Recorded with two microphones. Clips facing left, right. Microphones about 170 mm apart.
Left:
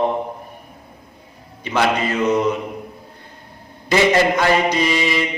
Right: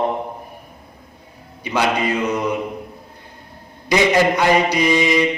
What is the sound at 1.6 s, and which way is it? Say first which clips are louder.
Speech: even; 15° right (ahead or behind).